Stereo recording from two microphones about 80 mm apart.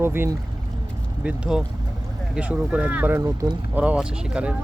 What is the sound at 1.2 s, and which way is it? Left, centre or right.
Speech, centre.